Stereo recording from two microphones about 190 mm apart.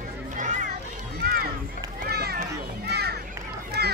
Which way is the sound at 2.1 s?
55° right (ahead or behind).